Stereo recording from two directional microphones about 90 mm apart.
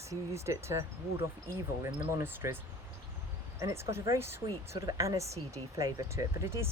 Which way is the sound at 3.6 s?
30° right (ahead or behind).